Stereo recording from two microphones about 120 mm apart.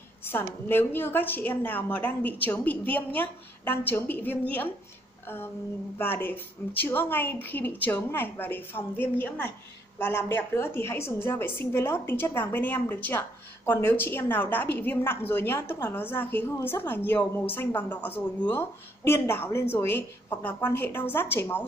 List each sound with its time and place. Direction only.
0.2 s a woman's voice: 20° left (ahead or behind)